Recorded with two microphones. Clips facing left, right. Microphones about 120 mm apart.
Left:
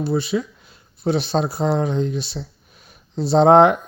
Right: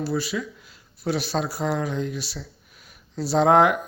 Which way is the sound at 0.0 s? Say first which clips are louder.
Left 5 dB; 25° left (ahead or behind).